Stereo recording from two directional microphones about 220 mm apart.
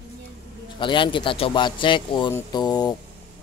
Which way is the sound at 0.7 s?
20° left (ahead or behind).